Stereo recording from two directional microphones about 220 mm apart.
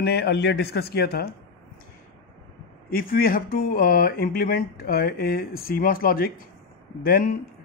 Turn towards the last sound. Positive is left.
turn(degrees=40)  # may be behind; listen again after turning